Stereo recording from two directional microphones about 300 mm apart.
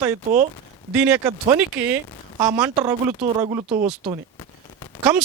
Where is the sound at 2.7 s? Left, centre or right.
Centre.